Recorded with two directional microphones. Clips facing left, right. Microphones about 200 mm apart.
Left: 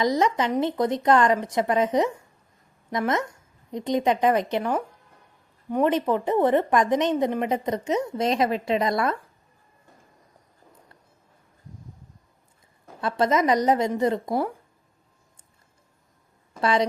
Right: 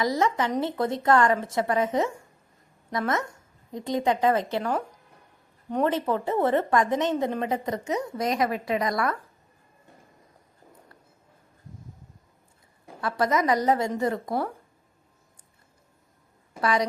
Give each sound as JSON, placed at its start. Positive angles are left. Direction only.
{"t": 0.0, "sound": "a woman's voice", "side_deg": 20}
{"t": 5.7, "sound": "a woman's voice", "side_deg": 15}
{"t": 13.0, "sound": "a woman's voice", "side_deg": 25}
{"t": 16.6, "sound": "a woman's voice", "side_deg": 25}